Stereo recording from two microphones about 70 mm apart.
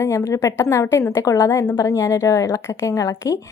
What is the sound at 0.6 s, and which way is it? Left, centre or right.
A woman's voice, left.